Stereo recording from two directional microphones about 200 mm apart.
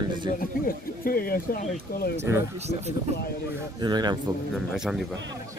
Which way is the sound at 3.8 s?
20° right (ahead or behind).